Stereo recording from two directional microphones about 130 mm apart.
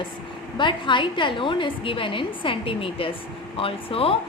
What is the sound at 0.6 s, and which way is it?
A woman's voice, 40° left (ahead or behind).